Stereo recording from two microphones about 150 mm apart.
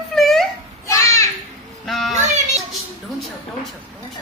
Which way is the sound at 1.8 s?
Centre (ahead or behind).